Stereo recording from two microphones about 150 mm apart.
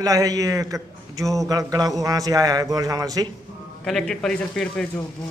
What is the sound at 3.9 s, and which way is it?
Speech, 5° left (ahead or behind).